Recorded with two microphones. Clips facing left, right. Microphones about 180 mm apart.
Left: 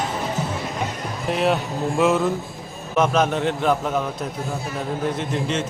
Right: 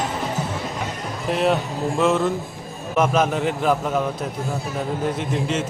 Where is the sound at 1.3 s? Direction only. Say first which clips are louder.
Right 1 dB; centre (ahead or behind).